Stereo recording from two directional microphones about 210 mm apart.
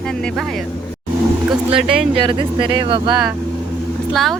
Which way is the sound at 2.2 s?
25° right (ahead or behind).